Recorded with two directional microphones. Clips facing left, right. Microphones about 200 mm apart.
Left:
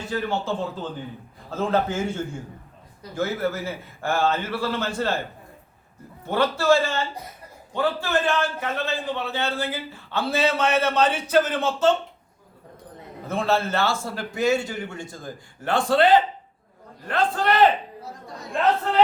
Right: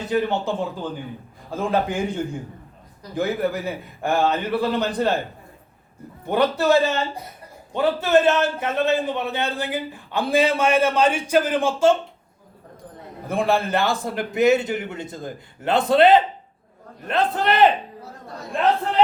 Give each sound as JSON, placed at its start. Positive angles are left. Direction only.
{"t": 0.1, "sound": "a man's voice", "side_deg": -20}
{"t": 6.2, "sound": "a man's voice", "side_deg": -15}
{"t": 13.2, "sound": "a man's voice", "side_deg": -15}